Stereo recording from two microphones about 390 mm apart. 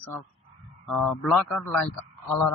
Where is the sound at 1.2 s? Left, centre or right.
Centre.